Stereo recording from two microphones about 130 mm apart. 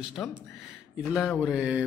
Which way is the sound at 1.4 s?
5° right (ahead or behind).